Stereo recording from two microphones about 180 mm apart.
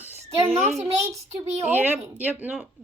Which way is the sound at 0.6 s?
40° right (ahead or behind).